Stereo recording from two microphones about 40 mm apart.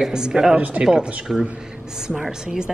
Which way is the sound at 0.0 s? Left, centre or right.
Centre.